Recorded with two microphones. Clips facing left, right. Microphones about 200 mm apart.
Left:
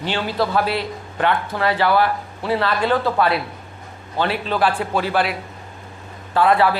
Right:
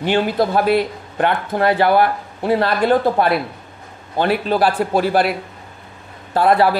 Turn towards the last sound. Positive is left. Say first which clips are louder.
# right 2 dB
turn(degrees=-40)  # may be behind; listen again after turning